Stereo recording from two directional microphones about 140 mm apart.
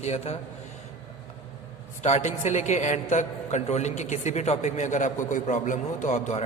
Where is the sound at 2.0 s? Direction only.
55° left (ahead or behind).